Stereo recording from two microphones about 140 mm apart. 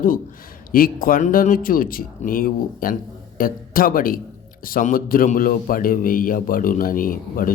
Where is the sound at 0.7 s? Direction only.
90° left.